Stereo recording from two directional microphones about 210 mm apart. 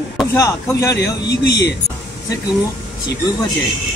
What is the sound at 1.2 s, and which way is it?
Speech, 50° left (ahead or behind).